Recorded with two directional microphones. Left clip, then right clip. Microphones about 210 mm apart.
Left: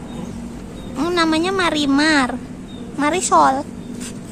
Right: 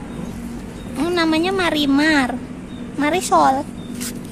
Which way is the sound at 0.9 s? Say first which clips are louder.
Left 1 dB; centre (ahead or behind).